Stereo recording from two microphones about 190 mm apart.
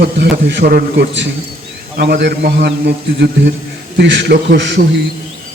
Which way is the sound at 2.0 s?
60° right (ahead or behind).